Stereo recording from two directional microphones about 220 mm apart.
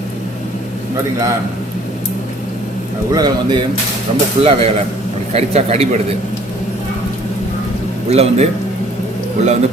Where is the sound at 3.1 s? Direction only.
20° right (ahead or behind).